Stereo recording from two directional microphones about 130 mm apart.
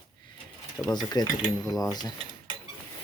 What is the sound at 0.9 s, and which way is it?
Speech, 30° left (ahead or behind).